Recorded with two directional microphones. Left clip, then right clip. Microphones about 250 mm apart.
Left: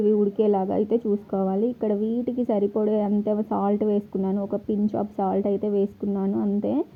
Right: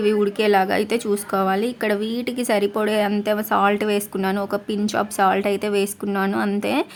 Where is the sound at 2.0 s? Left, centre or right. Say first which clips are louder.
Right 1 dB; right.